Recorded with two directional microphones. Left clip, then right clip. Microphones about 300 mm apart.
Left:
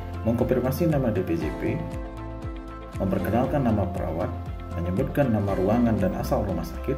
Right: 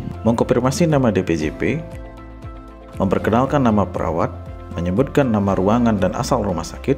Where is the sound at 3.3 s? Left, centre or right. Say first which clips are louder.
Right 7 dB; right.